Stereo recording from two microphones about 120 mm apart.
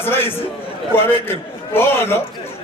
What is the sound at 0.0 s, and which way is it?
A man's voice, 20° left (ahead or behind).